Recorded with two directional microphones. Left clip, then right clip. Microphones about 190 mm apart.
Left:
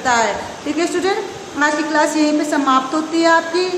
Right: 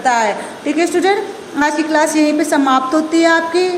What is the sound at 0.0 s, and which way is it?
A woman's voice, 15° right (ahead or behind).